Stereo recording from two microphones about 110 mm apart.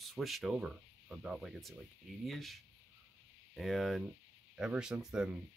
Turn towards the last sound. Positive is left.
turn(degrees=-5)  # may be behind; listen again after turning